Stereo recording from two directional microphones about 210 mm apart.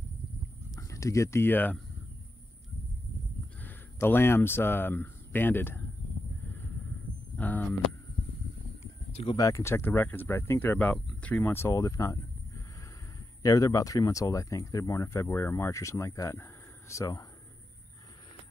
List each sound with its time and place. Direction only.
0.7 s speech: 15° left (ahead or behind)
3.6 s speech: 10° left (ahead or behind)
7.3 s speech: 5° left (ahead or behind)
9.1 s speech: 25° left (ahead or behind)
13.4 s speech: 15° left (ahead or behind)